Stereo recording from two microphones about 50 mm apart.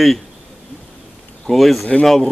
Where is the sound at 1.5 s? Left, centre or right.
Centre.